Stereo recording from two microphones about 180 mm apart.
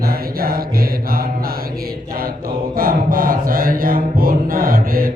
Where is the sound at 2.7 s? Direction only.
55° right (ahead or behind).